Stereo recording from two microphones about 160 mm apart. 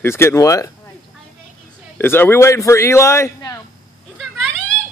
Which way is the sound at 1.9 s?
15° left (ahead or behind).